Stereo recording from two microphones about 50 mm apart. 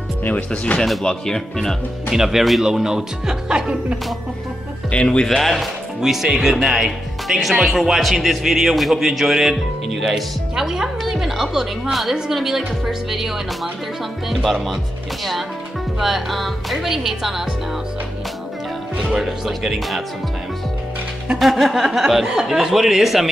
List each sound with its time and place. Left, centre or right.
0.7 s speech: left
1.0 s speech: centre
2.0 s speech: centre
4.9 s speech: left
5.4 s speech: centre
9.9 s speech: centre
10.5 s music: centre
11.5 s speech: centre
14.3 s speech: centre
16.0 s speech: centre
19.0 s speech: centre
21.4 s speech: centre